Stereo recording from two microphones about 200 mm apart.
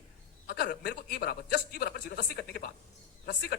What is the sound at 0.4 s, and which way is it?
A man's voice, 50° left (ahead or behind).